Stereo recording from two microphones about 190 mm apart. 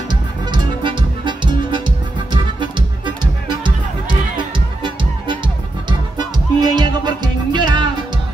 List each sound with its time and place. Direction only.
0.1 s music: 25° right (ahead or behind)
3.4 s music: 25° right (ahead or behind)